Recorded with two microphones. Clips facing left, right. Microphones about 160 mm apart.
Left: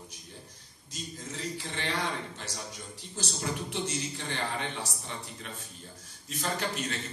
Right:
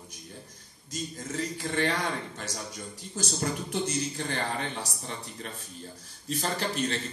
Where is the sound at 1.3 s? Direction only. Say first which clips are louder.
Right 7 dB; 50° right (ahead or behind).